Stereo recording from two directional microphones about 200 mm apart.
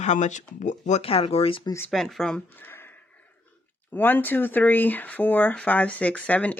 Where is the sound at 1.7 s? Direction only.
5° left (ahead or behind).